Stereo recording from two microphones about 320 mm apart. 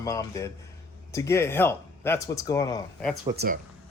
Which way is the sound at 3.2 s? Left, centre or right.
Right.